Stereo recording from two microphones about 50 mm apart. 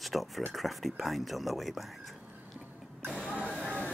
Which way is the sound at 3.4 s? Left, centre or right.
Left.